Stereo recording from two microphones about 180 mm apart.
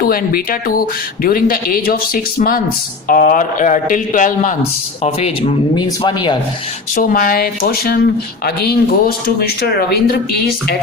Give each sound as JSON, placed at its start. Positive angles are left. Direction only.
{"t": 0.0, "sound": "a man's voice", "side_deg": 55}
{"t": 5.0, "sound": "speech", "side_deg": 35}
{"t": 5.7, "sound": "speech", "side_deg": 25}
{"t": 6.9, "sound": "a man's voice", "side_deg": 50}